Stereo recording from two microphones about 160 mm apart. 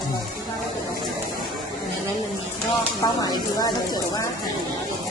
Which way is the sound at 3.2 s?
25° left (ahead or behind).